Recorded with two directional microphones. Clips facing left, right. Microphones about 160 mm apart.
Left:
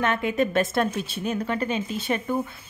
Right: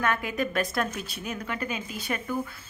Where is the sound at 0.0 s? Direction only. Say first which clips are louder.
Left 4 dB; 25° left (ahead or behind).